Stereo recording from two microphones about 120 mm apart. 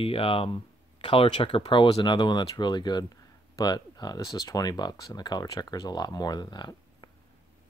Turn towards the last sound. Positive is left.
turn(degrees=40)  # may be behind; listen again after turning